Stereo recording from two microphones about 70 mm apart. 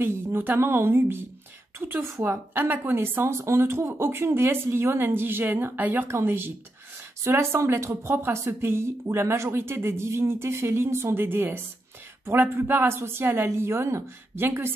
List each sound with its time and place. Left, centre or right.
0.0 s a woman's voice: right
2.5 s speech: right